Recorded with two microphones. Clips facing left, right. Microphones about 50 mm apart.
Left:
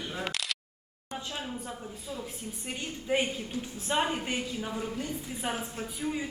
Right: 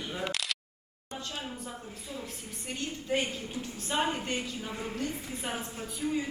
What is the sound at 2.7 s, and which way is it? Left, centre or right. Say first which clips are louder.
A woman's voice: left 1 dB; centre.